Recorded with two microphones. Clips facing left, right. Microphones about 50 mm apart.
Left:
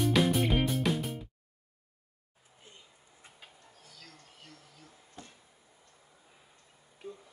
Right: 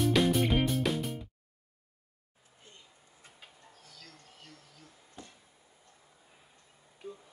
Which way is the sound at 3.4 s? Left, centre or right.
Centre.